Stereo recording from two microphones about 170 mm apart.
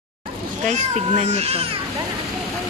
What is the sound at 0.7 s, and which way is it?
Speech, 40° right (ahead or behind).